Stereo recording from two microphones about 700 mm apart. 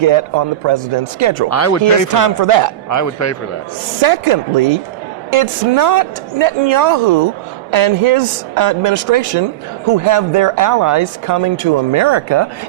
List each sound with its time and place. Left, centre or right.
0.0 s speech: right
1.5 s a man's voice: left
2.1 s speech: right
2.9 s a man's voice: left
4.0 s speech: right